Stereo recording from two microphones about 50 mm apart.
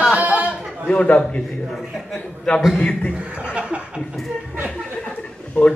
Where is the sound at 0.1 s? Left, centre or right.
Right.